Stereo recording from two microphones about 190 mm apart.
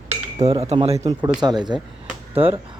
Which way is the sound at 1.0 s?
20° right (ahead or behind).